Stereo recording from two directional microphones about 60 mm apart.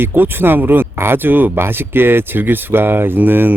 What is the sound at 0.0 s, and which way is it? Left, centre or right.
Speech, right.